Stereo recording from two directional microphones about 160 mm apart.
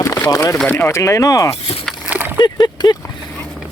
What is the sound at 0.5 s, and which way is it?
Speech, 10° left (ahead or behind).